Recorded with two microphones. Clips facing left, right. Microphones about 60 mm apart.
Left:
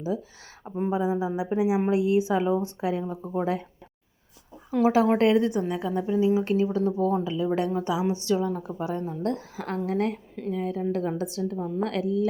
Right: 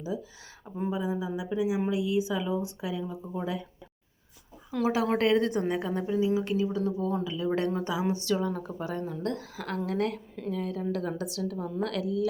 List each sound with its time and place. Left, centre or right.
0.9 s a woman's voice: left
4.7 s a woman's voice: left
5.5 s a woman's voice: centre
5.9 s speech: centre
6.1 s speech: left
7.1 s speech: left
7.4 s speech: centre
8.9 s a woman's voice: left
11.5 s speech: centre
11.8 s speech: left